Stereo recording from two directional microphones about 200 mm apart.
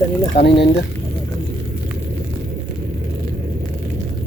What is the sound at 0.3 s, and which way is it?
Speech, 55° left (ahead or behind).